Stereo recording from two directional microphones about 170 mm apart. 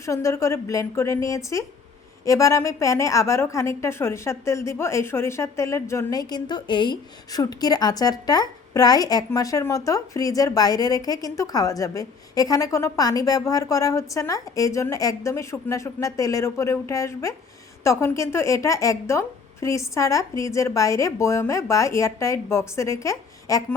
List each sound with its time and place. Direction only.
0.0 s a woman's voice: 15° left (ahead or behind)